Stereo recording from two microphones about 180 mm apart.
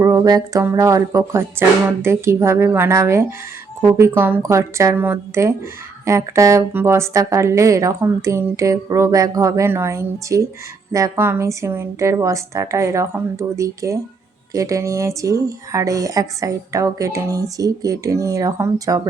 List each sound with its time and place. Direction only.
0.0 s speech: 20° right (ahead or behind)